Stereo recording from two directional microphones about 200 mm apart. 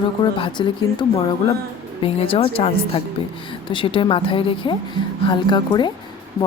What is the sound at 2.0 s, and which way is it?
Speech, 25° left (ahead or behind).